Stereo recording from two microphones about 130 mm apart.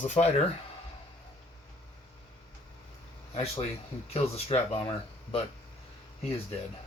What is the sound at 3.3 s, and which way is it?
Speech, 50° left (ahead or behind).